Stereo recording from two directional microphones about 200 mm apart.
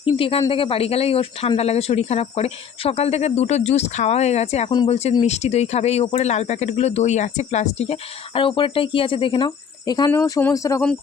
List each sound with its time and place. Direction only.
0.0 s speech: 25° left (ahead or behind)
4.7 s speech: 20° left (ahead or behind)
4.9 s speech: 30° left (ahead or behind); by 10.8 s 15° left (ahead or behind)